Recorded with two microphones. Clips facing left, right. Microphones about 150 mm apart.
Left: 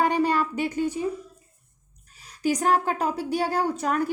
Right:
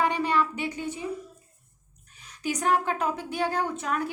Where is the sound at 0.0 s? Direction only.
40° left (ahead or behind).